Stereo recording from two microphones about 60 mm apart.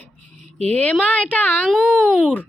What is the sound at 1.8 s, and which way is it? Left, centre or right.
Speech, centre.